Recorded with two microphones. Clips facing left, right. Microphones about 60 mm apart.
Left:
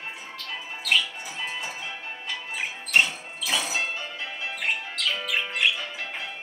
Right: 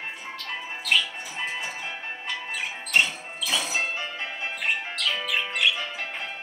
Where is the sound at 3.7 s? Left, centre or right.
Right.